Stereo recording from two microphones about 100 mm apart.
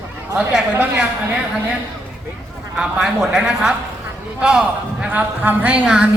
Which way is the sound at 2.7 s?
5° right (ahead or behind).